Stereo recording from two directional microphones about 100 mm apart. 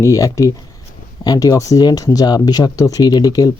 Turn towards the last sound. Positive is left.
turn(degrees=40)  # may be behind; listen again after turning